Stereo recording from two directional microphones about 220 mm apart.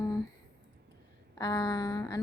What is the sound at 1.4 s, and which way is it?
Speech, 20° left (ahead or behind).